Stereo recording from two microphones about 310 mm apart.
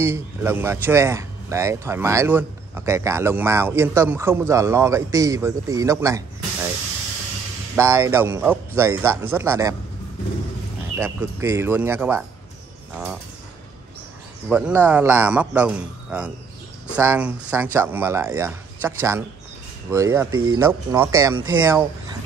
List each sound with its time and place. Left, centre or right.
0.0 s speech: centre
7.7 s speech: centre
11.0 s a man's voice: centre
14.5 s a man's voice: centre
20.2 s speech: right
20.5 s speech: centre